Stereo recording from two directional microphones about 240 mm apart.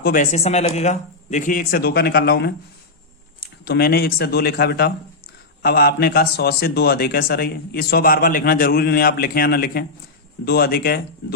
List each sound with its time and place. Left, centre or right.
0.0 s a man's voice: left